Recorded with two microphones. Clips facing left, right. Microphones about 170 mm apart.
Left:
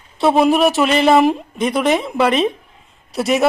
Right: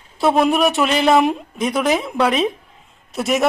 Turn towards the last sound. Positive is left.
turn(degrees=0)  # may be behind; listen again after turning